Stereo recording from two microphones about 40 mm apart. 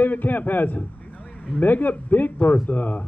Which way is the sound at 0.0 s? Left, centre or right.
Left.